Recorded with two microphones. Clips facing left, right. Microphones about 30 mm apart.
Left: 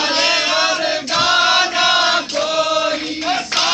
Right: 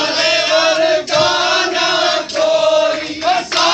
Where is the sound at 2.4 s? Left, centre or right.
Right.